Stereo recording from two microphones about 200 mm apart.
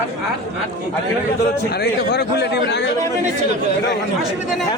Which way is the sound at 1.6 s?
55° left (ahead or behind).